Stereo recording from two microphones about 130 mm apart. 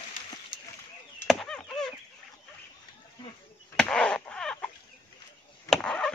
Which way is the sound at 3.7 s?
5° left (ahead or behind).